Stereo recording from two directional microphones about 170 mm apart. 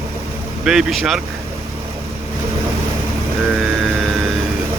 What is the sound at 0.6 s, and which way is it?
Speech, 5° right (ahead or behind).